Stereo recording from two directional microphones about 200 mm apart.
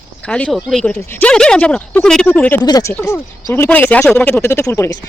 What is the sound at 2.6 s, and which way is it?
Speech, 20° left (ahead or behind).